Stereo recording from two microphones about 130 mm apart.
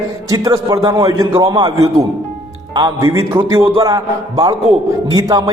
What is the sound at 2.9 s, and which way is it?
Speech, 20° right (ahead or behind).